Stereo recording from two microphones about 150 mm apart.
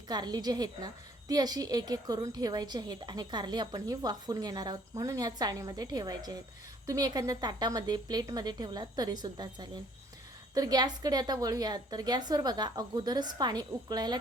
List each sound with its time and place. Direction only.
0.1 s a woman's voice: 25° right (ahead or behind)